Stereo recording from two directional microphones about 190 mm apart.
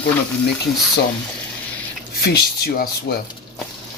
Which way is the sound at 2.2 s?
55° left (ahead or behind).